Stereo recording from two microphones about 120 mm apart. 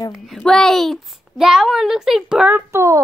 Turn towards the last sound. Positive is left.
turn(degrees=-20)  # may be behind; listen again after turning